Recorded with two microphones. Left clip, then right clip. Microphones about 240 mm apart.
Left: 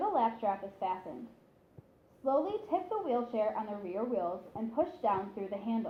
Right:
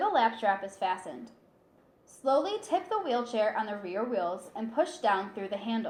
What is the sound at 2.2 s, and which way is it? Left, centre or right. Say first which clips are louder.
A woman's voice: right 4 dB; right.